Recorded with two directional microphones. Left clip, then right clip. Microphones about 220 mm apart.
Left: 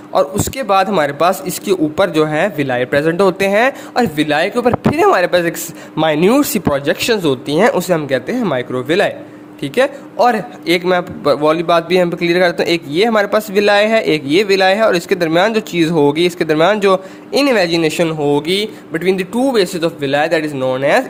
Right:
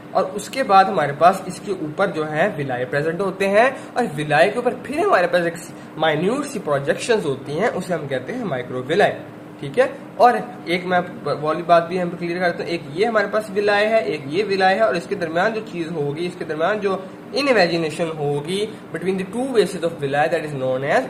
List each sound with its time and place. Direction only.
0.1 s a man's voice: 50° left (ahead or behind)